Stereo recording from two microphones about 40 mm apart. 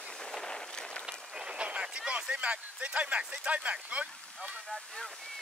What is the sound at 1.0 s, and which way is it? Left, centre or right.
Run, centre.